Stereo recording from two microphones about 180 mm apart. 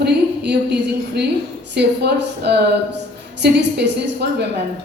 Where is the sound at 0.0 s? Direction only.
70° right (ahead or behind).